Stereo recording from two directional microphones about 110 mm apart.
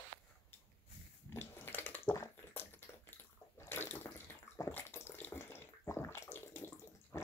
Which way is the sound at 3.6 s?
20° left (ahead or behind).